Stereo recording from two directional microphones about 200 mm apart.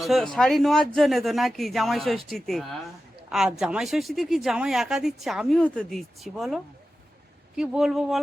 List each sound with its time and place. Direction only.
0.0 s speech: centre (ahead or behind)